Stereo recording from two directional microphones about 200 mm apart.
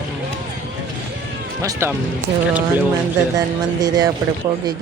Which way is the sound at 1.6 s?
15° right (ahead or behind).